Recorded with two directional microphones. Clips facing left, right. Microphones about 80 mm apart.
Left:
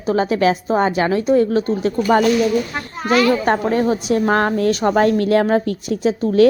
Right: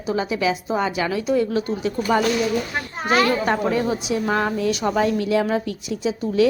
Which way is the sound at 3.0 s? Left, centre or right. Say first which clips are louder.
Left 4 dB; right.